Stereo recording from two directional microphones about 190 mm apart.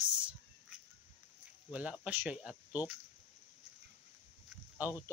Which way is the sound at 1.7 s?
5° right (ahead or behind).